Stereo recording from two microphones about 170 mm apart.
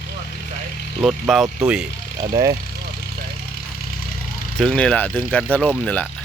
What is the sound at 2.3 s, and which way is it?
Speech, 20° right (ahead or behind).